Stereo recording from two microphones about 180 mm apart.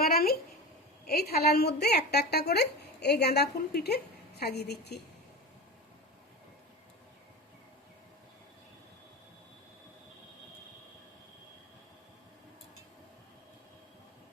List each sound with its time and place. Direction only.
0.0 s a woman's voice: 55° left (ahead or behind)